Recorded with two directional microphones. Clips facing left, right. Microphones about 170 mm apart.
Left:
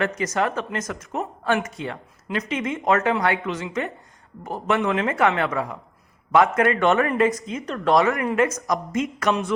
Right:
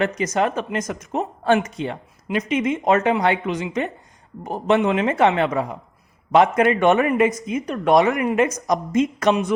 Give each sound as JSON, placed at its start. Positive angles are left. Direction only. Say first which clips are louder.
{"t": 0.0, "sound": "speech", "louder": "right 3 dB", "side_deg": -20}